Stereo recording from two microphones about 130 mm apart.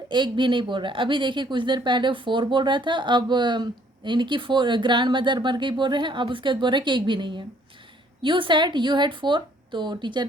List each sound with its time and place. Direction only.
0.1 s speech: 35° right (ahead or behind)